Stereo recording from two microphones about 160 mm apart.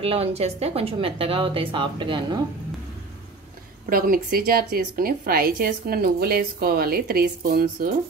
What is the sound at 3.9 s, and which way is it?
A woman's voice, 65° right (ahead or behind).